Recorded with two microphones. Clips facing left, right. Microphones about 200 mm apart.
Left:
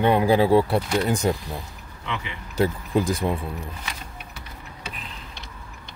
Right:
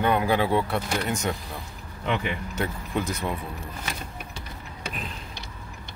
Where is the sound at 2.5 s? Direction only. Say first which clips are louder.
Left 10 dB; 35° left (ahead or behind).